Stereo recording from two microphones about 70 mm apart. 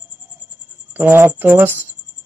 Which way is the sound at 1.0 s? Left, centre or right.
Right.